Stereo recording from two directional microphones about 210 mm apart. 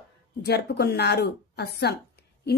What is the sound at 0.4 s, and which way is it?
Speech, 50° left (ahead or behind).